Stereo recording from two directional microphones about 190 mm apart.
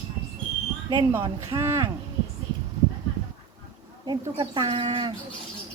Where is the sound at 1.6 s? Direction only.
15° right (ahead or behind).